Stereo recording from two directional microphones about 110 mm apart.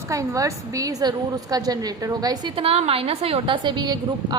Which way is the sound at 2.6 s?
65° right (ahead or behind).